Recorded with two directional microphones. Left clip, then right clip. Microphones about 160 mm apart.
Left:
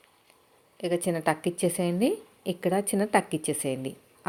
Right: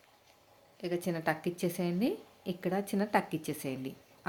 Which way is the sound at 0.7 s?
10° left (ahead or behind).